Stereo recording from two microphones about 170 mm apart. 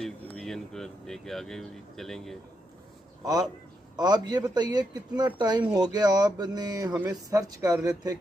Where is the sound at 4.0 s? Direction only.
25° right (ahead or behind).